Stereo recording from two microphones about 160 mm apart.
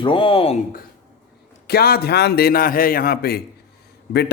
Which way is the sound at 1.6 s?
75° left (ahead or behind).